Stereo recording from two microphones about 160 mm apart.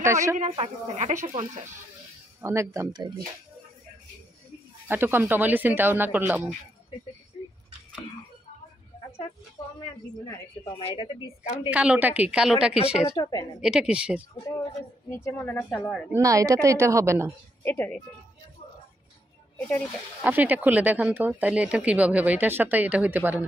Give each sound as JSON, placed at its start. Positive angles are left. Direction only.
{"t": 0.0, "sound": "speech", "side_deg": -20}
{"t": 0.4, "sound": "speech", "side_deg": -40}
{"t": 2.4, "sound": "a woman's voice", "side_deg": -20}
{"t": 4.8, "sound": "speech", "side_deg": -15}
{"t": 10.8, "sound": "speech", "side_deg": 35}
{"t": 11.7, "sound": "speech", "side_deg": -10}
{"t": 12.7, "sound": "speech", "side_deg": 40}
{"t": 13.1, "sound": "a woman's voice", "side_deg": 20}
{"t": 13.6, "sound": "speech", "side_deg": -5}
{"t": 15.0, "sound": "a woman's voice", "side_deg": 15}
{"t": 16.1, "sound": "a woman's voice", "side_deg": -20}
{"t": 17.6, "sound": "a woman's voice", "side_deg": 10}
{"t": 20.2, "sound": "speech", "side_deg": -10}